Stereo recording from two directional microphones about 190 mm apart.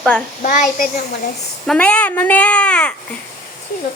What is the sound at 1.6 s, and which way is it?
Speech, 5° left (ahead or behind).